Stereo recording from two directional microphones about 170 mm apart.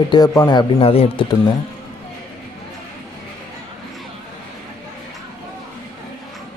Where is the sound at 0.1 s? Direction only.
20° left (ahead or behind).